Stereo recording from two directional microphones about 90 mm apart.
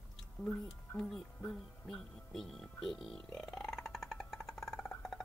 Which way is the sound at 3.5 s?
5° left (ahead or behind).